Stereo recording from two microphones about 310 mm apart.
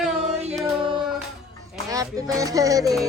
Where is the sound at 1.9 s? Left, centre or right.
Centre.